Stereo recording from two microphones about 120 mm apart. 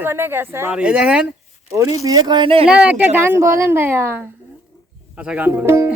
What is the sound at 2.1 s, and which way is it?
Speech, 35° right (ahead or behind).